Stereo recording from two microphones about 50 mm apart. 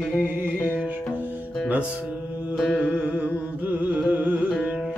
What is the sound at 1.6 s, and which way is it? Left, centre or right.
Speech, right.